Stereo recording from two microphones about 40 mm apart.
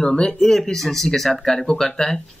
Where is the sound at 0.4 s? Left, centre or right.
Centre.